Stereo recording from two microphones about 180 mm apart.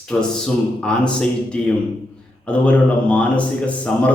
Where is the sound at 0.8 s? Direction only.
5° left (ahead or behind).